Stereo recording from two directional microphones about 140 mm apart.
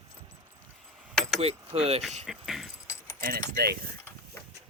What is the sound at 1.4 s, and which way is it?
Speech, 45° right (ahead or behind).